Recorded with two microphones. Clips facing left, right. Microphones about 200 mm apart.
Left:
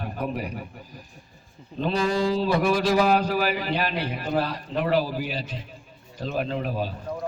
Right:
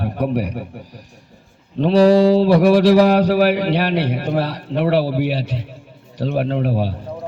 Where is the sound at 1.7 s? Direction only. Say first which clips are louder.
Right 12 dB; 75° right (ahead or behind).